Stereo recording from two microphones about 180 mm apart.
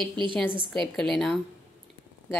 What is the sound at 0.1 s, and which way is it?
Speech, 25° right (ahead or behind).